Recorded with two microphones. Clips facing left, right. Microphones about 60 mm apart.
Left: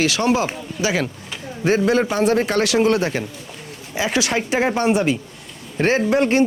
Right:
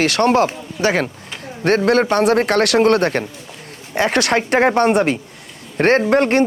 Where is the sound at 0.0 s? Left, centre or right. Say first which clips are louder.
Right 4 dB; right.